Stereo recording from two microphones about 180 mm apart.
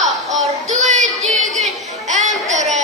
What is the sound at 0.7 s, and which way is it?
Child singing, 40° right (ahead or behind).